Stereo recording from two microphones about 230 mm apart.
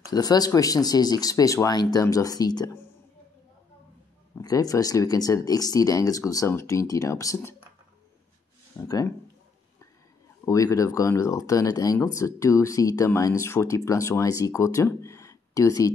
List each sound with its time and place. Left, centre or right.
0.0 s speech: centre
4.4 s speech: centre
8.7 s speech: centre
10.4 s speech: centre